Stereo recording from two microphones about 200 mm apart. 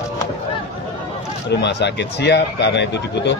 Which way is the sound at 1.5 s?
60° left (ahead or behind).